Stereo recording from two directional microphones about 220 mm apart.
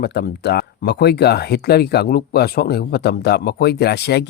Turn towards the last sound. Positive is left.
turn(degrees=45)  # may be behind; listen again after turning